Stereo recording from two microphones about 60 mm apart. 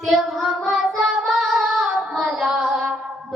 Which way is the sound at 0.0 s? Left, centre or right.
Centre.